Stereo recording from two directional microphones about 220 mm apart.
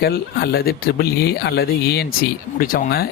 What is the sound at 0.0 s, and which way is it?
Speech, 45° left (ahead or behind).